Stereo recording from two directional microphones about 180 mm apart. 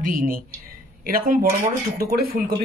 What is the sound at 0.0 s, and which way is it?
Speech, 50° right (ahead or behind).